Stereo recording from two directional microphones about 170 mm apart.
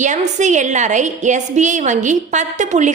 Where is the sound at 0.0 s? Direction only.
45° right (ahead or behind).